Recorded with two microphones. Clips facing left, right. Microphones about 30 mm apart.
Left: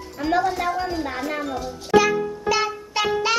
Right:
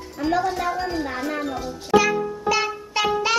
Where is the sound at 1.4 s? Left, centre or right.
Centre.